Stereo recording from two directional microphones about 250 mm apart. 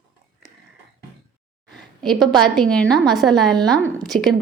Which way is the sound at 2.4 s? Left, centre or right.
Centre.